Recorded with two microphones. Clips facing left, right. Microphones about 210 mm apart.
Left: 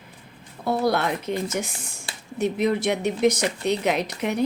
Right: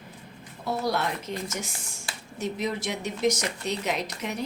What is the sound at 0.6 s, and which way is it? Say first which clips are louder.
Speech: left 5 dB; 60° left (ahead or behind).